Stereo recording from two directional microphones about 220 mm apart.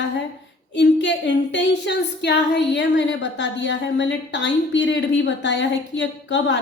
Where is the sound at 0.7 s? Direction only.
55° left (ahead or behind).